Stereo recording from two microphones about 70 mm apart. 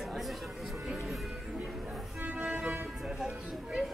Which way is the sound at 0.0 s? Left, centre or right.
Centre.